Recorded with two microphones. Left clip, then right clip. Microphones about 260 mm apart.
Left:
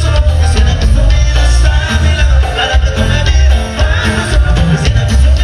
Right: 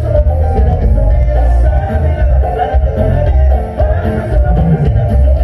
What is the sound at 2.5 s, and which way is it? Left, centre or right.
Music, left.